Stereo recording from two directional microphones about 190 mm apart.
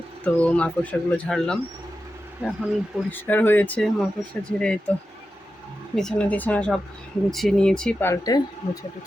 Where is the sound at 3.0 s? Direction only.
10° left (ahead or behind).